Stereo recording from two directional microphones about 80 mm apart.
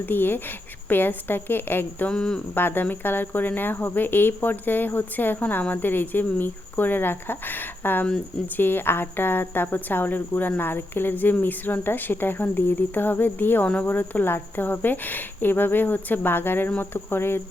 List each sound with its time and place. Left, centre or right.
0.0 s speech: left
2.0 s speech: centre
2.6 s speech: left